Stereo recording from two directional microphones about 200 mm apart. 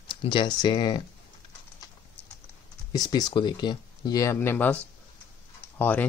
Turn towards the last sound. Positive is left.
turn(degrees=10)  # may be behind; listen again after turning